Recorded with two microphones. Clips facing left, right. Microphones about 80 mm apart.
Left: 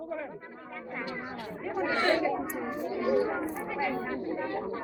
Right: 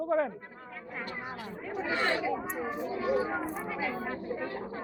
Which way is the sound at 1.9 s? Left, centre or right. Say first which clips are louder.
Left 3 dB; centre.